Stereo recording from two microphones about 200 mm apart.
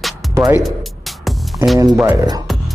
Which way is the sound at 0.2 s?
Centre (ahead or behind).